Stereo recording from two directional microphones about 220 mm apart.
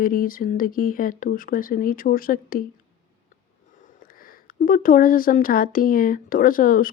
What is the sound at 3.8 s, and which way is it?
Speech, 40° left (ahead or behind).